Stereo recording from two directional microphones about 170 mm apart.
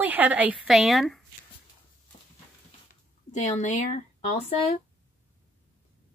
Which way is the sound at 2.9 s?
45° left (ahead or behind).